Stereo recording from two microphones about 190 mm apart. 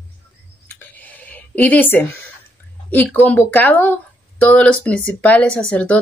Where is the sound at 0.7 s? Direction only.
10° left (ahead or behind).